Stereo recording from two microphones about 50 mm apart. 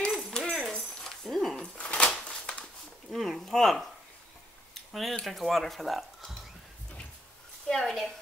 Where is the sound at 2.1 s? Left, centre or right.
Left.